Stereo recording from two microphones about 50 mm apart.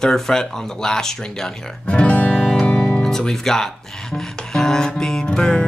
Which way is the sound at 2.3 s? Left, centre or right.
Centre.